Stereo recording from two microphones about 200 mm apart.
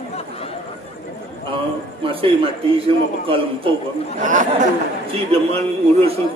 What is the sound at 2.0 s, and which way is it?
Speech, 25° right (ahead or behind).